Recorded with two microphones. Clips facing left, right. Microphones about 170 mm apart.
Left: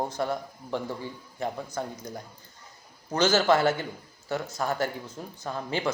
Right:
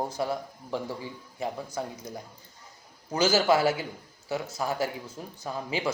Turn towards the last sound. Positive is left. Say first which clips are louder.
# left 1 dB
turn(degrees=-5)  # may be behind; listen again after turning